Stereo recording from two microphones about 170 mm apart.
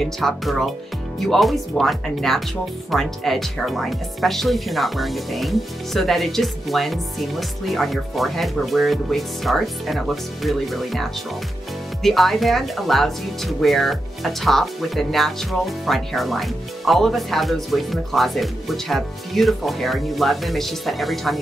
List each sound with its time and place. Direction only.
0.0 s speech: centre (ahead or behind)